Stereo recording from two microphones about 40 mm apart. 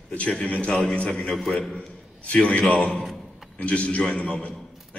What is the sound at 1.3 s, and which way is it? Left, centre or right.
Speech, centre.